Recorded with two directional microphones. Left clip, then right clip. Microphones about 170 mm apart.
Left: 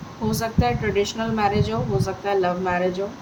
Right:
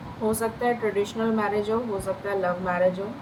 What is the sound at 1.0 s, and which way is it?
A woman's voice, 45° left (ahead or behind).